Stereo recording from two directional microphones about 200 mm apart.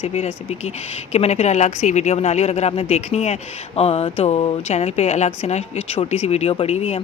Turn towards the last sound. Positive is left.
turn(degrees=30)  # may be behind; listen again after turning